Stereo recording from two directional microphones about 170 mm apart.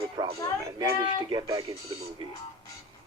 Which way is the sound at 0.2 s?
20° right (ahead or behind).